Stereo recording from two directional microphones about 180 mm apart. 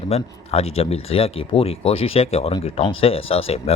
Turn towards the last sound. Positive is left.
turn(degrees=35)  # may be behind; listen again after turning